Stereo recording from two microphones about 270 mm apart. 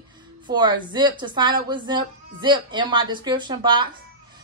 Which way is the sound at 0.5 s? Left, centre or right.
Centre.